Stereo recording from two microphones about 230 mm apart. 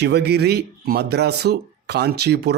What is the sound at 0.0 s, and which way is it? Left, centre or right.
Speech, right.